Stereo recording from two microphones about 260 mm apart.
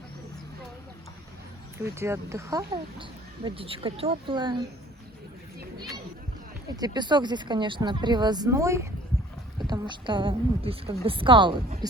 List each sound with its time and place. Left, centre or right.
1.8 s speech: centre
6.7 s a woman's voice: centre